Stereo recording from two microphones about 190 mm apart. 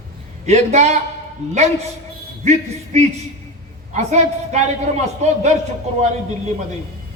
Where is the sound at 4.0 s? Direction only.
35° right (ahead or behind).